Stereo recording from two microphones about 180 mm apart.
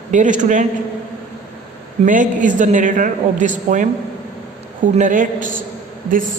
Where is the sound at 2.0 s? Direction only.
45° right (ahead or behind).